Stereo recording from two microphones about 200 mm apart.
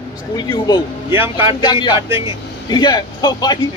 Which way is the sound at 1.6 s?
20° left (ahead or behind).